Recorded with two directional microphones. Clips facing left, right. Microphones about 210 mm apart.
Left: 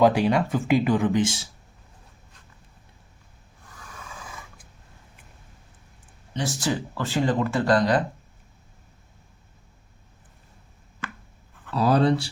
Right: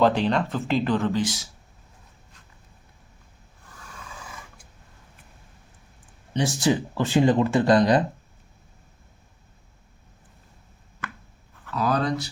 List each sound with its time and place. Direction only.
0.0 s speech: 10° left (ahead or behind)
6.3 s speech: 15° right (ahead or behind)
11.7 s speech: 30° left (ahead or behind)